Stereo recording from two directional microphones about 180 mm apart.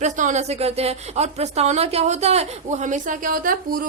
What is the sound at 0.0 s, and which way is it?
A woman's voice, 45° right (ahead or behind).